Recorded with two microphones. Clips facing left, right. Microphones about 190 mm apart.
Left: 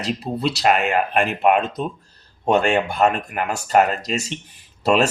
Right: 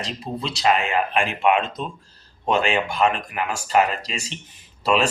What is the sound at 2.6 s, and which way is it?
Speech, 45° left (ahead or behind).